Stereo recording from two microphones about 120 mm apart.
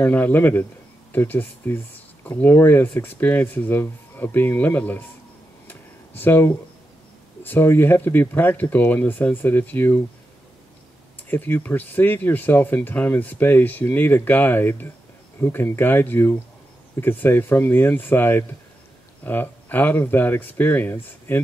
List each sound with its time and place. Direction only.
0.0 s speech: 15° left (ahead or behind)
5.7 s a sound: 15° left (ahead or behind)
7.4 s speech: 20° left (ahead or behind)
11.1 s speech: 15° left (ahead or behind)